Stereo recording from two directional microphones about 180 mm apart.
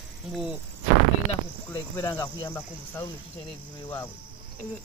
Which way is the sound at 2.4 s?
10° left (ahead or behind).